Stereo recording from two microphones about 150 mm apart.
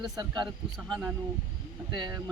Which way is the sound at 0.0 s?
25° right (ahead or behind).